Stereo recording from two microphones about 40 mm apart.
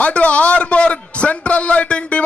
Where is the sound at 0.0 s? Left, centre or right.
Left.